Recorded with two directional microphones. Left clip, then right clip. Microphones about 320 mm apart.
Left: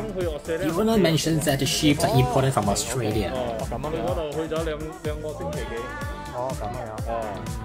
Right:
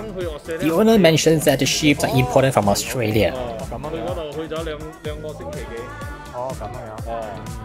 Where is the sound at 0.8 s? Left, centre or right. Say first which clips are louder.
Right 9 dB; right.